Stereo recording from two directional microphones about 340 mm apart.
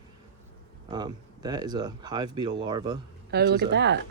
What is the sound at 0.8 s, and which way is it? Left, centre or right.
Speech, centre.